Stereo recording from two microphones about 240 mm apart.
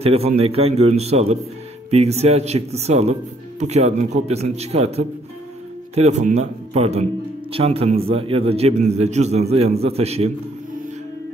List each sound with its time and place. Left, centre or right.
0.0 s speech: right